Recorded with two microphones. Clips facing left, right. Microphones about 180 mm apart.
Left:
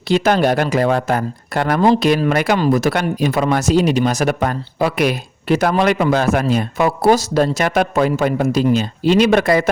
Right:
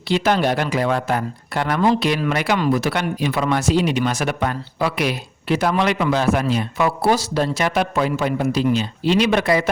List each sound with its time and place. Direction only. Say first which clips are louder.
0.1 s speech: left 4 dB; 45° left (ahead or behind)